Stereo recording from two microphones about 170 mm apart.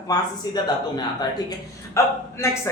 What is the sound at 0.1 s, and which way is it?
A man's voice, 25° left (ahead or behind).